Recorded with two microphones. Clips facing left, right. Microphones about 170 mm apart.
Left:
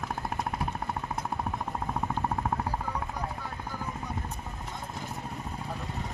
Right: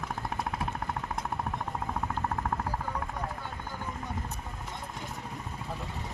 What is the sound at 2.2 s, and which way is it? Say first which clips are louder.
Vehicle: left 2 dB; 10° left (ahead or behind).